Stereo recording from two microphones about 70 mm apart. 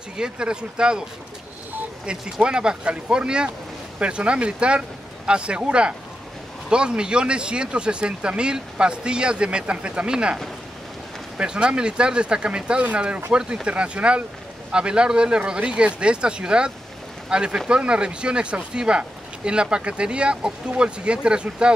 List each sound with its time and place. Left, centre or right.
0.2 s speech: centre
2.0 s speech: centre